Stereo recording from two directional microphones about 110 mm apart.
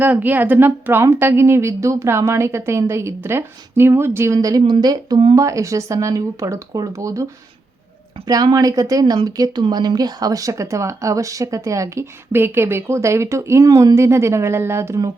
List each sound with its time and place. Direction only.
0.0 s speech: 15° right (ahead or behind)
8.2 s speech: 40° right (ahead or behind)